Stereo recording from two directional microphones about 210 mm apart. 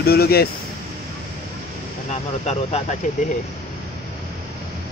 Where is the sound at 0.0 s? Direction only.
50° left (ahead or behind).